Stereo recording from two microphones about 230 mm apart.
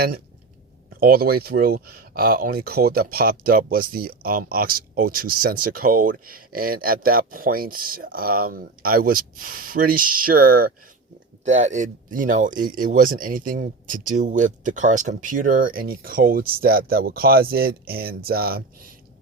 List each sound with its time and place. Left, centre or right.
0.9 s speech: right